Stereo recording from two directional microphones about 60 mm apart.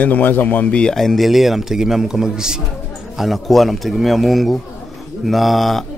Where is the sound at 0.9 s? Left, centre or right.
Centre.